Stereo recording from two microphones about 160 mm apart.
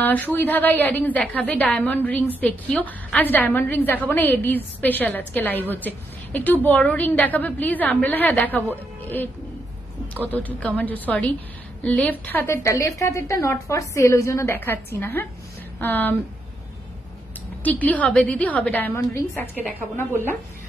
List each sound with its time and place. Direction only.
0.0 s a woman's voice: 10° left (ahead or behind)
17.6 s a woman's voice: 10° left (ahead or behind)